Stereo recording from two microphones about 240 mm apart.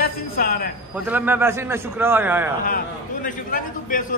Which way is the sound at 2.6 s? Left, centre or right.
Left.